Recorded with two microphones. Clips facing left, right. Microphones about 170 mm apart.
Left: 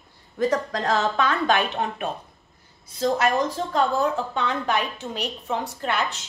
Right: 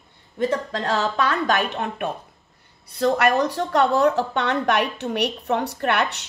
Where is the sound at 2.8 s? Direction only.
65° right (ahead or behind).